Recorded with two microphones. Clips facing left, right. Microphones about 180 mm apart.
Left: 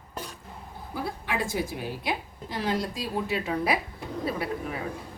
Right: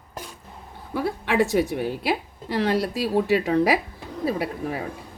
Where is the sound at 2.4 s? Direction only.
70° right (ahead or behind).